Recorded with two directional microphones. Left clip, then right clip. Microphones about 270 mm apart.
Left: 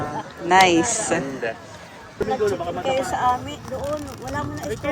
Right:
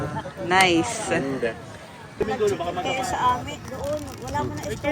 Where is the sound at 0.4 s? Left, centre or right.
Centre.